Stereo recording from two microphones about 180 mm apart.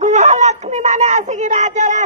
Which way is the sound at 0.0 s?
40° right (ahead or behind).